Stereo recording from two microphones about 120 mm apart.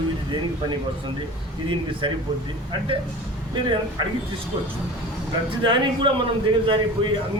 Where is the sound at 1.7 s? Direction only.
45° right (ahead or behind).